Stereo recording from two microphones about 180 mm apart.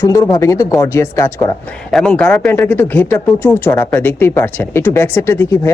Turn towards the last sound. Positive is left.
turn(degrees=10)  # may be behind; listen again after turning